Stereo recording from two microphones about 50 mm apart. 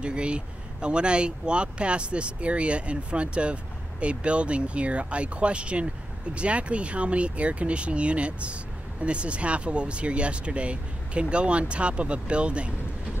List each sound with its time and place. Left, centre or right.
0.0 s speech: right